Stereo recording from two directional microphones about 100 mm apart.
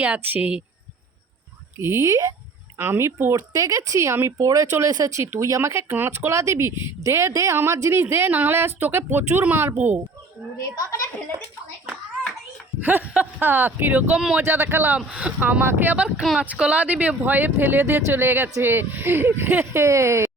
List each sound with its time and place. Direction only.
0.0 s speech: 15° right (ahead or behind)
1.8 s speech: 25° right (ahead or behind)
2.7 s speech: 20° right (ahead or behind)
3.3 s speech: 35° right (ahead or behind); by 10.1 s 20° right (ahead or behind)
12.8 s speech: 20° right (ahead or behind)
14.2 s speech: 5° right (ahead or behind)
14.4 s speech: 25° right (ahead or behind)